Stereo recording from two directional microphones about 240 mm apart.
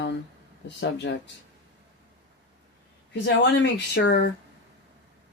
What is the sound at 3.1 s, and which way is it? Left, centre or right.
Speech, left.